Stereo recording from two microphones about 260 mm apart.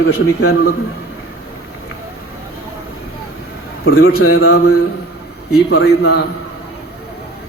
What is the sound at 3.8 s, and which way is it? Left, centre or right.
Speech, left.